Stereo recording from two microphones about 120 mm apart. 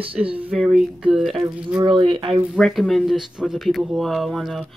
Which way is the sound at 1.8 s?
45° right (ahead or behind).